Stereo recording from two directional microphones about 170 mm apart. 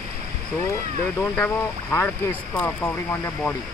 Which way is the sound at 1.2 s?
10° left (ahead or behind).